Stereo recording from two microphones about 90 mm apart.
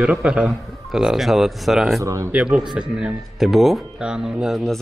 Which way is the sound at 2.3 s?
10° right (ahead or behind).